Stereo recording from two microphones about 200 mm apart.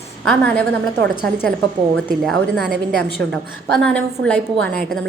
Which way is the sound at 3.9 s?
5° left (ahead or behind).